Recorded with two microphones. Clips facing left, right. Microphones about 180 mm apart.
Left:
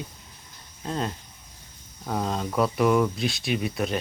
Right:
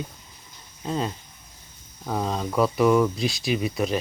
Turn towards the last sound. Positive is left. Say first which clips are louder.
# right 2 dB
turn(degrees=0)  # may be behind; listen again after turning